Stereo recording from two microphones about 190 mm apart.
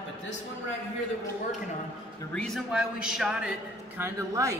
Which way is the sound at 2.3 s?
5° left (ahead or behind).